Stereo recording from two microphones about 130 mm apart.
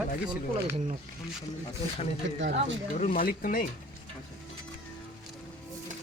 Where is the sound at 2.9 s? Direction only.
80° left.